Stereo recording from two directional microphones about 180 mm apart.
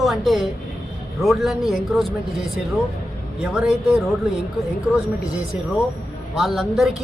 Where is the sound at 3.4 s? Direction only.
Centre (ahead or behind).